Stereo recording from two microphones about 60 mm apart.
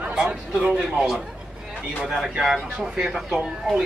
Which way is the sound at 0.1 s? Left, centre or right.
Centre.